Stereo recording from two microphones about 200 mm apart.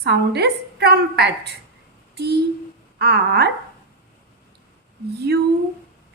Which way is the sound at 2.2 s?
55° right (ahead or behind).